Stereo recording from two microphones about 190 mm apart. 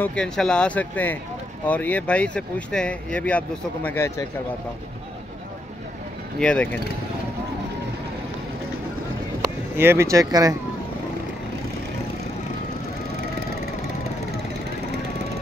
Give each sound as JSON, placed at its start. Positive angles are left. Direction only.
{"t": 0.0, "sound": "speech", "side_deg": 5}
{"t": 6.4, "sound": "speech", "side_deg": 5}
{"t": 9.4, "sound": "speech", "side_deg": -15}